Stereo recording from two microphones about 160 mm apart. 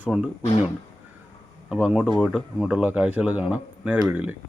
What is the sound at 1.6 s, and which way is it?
Speech, 5° right (ahead or behind).